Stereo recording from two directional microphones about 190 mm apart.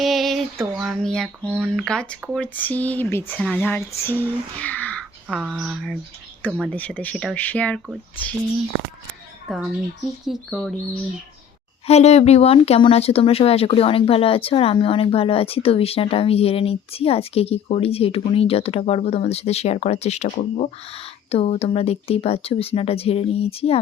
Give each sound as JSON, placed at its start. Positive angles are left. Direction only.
{"t": 0.0, "sound": "a sound", "side_deg": 0}
{"t": 0.6, "sound": "speech", "side_deg": 0}
{"t": 9.5, "sound": "speech", "side_deg": 0}
{"t": 11.9, "sound": "speech", "side_deg": 35}